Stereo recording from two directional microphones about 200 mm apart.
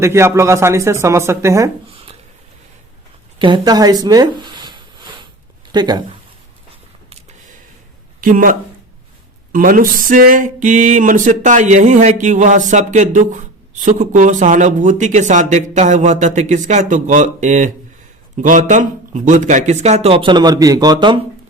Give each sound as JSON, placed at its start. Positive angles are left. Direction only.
{"t": 0.0, "sound": "speech", "side_deg": -15}
{"t": 3.3, "sound": "speech", "side_deg": -25}
{"t": 8.2, "sound": "speech", "side_deg": -40}
{"t": 9.5, "sound": "a sound", "side_deg": -45}